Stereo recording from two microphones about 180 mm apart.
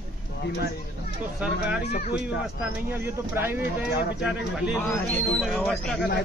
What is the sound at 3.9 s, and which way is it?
Speech, 65° left (ahead or behind).